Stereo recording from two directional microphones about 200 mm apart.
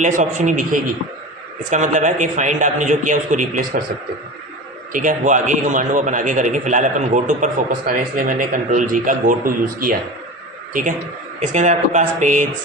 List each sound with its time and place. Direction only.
0.0 s a man's voice: 40° right (ahead or behind)
4.9 s a man's voice: 40° right (ahead or behind)
11.3 s a man's voice: 35° right (ahead or behind)